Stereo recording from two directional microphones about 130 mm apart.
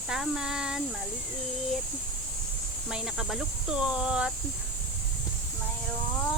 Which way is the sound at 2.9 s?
5° right (ahead or behind).